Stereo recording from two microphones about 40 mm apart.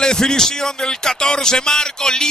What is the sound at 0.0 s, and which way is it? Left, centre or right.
Music, centre.